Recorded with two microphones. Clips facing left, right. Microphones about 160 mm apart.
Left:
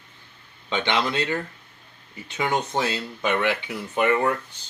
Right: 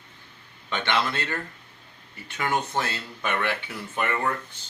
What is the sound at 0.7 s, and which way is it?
Speech, 15° left (ahead or behind).